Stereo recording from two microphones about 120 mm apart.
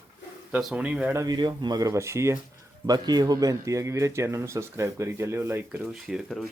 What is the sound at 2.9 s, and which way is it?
Speech, 35° right (ahead or behind).